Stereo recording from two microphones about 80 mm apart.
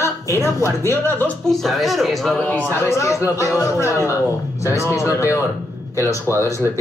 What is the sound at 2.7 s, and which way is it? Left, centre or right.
Speech, left.